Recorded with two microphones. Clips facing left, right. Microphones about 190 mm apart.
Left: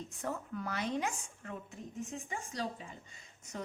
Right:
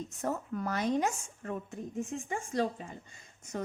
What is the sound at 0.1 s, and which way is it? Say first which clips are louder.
A woman's voice: right 5 dB; 40° right (ahead or behind).